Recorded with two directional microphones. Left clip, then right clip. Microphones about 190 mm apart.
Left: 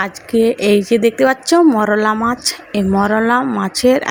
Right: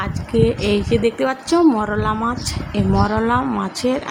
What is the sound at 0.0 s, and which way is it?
Speech, 25° left (ahead or behind).